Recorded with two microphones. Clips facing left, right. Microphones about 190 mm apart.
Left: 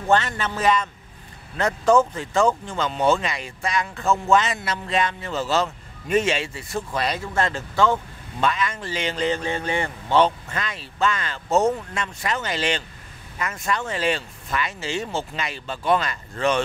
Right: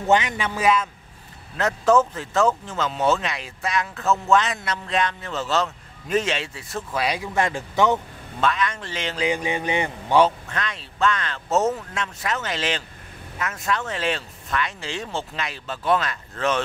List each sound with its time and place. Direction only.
0.0 s speech: 10° right (ahead or behind)
8.4 s speech: centre (ahead or behind)
9.3 s speech: 15° right (ahead or behind)
10.5 s speech: centre (ahead or behind)